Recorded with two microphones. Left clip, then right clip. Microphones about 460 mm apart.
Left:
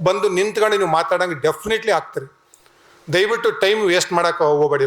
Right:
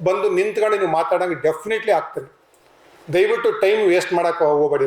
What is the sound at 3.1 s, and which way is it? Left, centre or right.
A man's voice, left.